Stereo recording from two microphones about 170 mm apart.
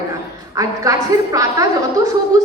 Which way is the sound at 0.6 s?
20° right (ahead or behind).